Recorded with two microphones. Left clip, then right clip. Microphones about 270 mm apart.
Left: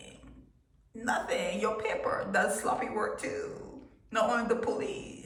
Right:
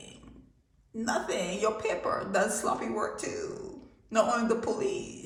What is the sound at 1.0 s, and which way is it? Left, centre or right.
A man's voice, right.